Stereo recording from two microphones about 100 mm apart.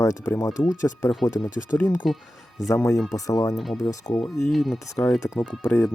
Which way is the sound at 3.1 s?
35° left (ahead or behind).